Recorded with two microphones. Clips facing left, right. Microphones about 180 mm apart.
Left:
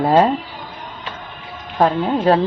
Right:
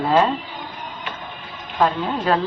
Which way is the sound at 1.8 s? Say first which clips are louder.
Left 4 dB; 35° left (ahead or behind).